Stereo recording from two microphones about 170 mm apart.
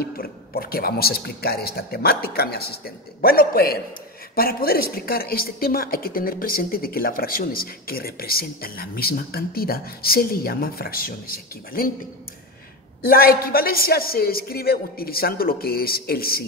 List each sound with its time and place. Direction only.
0.0 s a woman's voice: 60° left (ahead or behind)
13.1 s a woman's voice: 60° left (ahead or behind)